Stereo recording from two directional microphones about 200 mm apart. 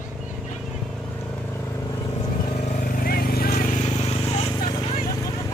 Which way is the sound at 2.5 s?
35° left (ahead or behind).